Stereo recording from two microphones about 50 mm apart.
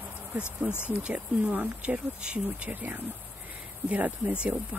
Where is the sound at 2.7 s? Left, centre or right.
Right.